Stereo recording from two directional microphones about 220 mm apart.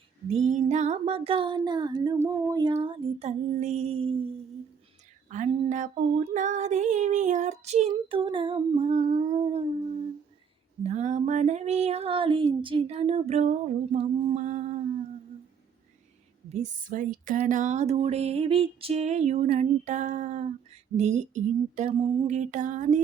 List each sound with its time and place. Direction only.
0.3 s music: 30° right (ahead or behind)
5.3 s speech: 35° right (ahead or behind)
10.8 s music: 30° right (ahead or behind)
16.5 s speech: 35° right (ahead or behind)